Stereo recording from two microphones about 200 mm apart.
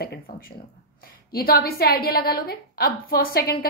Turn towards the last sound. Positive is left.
turn(degrees=50)  # may be behind; listen again after turning